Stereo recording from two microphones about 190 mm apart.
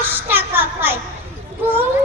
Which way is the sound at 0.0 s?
10° right (ahead or behind).